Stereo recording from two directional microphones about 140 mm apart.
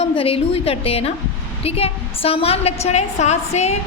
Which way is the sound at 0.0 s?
45° left (ahead or behind).